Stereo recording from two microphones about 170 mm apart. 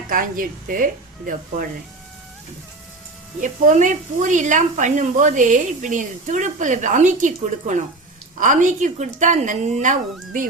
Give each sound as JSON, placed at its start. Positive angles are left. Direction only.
{"t": 0.1, "sound": "speech", "side_deg": -55}
{"t": 3.4, "sound": "speech", "side_deg": -50}